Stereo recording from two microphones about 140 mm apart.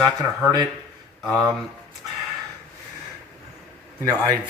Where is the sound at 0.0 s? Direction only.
30° right (ahead or behind).